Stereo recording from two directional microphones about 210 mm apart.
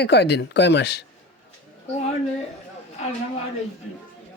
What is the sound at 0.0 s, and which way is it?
Speech, 50° left (ahead or behind).